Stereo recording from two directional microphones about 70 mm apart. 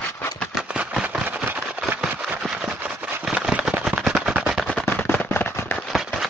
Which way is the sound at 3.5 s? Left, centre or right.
Centre.